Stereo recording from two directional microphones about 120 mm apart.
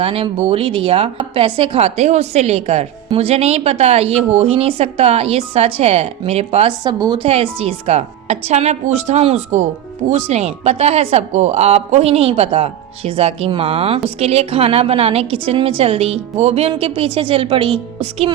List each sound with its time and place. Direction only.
0.0 s a woman's voice: 50° right (ahead or behind)
6.8 s a woman's voice: 35° right (ahead or behind)
7.3 s a woman's voice: 60° right (ahead or behind)